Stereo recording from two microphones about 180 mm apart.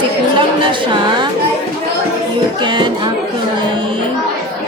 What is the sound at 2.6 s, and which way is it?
Speech, 25° right (ahead or behind).